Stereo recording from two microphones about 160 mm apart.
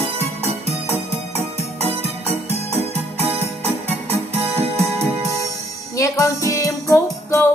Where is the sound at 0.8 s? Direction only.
15° left (ahead or behind).